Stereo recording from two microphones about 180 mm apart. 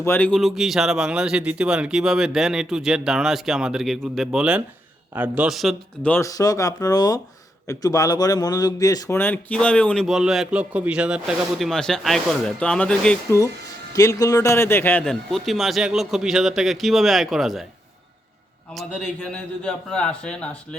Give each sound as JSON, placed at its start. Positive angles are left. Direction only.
{"t": 0.0, "sound": "a man's voice", "side_deg": 10}
{"t": 13.9, "sound": "a man's voice", "side_deg": 20}
{"t": 18.7, "sound": "a man's voice", "side_deg": 5}